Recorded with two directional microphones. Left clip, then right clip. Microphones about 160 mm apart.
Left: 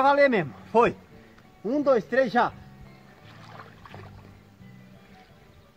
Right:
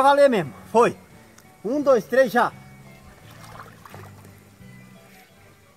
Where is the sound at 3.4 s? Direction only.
5° left (ahead or behind).